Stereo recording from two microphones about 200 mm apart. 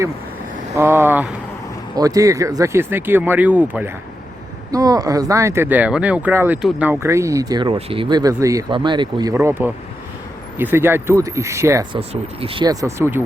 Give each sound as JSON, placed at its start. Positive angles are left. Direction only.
{"t": 0.8, "sound": "speech", "side_deg": -10}
{"t": 9.3, "sound": "speech", "side_deg": -10}
{"t": 11.9, "sound": "speech", "side_deg": -30}